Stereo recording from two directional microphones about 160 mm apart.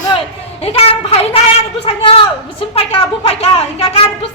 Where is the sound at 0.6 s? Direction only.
40° left (ahead or behind).